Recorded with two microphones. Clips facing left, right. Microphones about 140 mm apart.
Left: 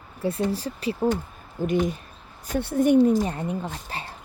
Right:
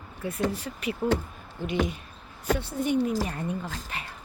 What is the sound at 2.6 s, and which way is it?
Speech, 65° left (ahead or behind).